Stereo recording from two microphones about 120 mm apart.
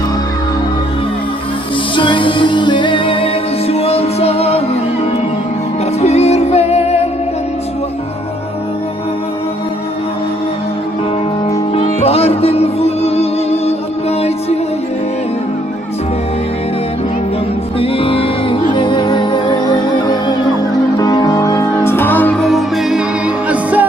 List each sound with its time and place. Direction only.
2.0 s music: 45° left (ahead or behind); by 4.8 s 60° left (ahead or behind)
6.0 s music: 60° left (ahead or behind)
11.9 s music: 55° left (ahead or behind)
17.7 s music: 50° left (ahead or behind); by 22.4 s 15° left (ahead or behind)
22.4 s music: centre (ahead or behind)